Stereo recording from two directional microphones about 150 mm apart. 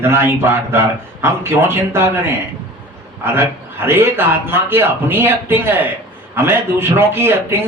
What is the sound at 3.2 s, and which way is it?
A man's voice, 15° right (ahead or behind).